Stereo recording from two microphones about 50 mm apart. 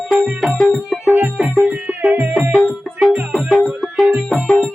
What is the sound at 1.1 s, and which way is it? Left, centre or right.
Music, right.